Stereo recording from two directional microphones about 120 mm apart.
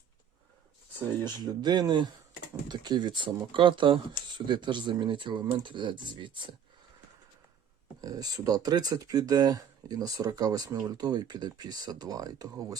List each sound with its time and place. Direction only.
1.2 s speech: 35° right (ahead or behind)
8.0 s speech: 30° right (ahead or behind)